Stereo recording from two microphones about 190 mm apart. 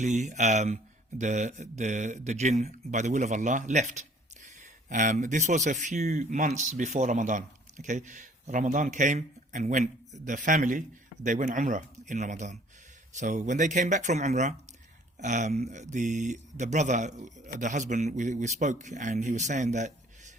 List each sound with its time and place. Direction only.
0.0 s speech: 40° right (ahead or behind)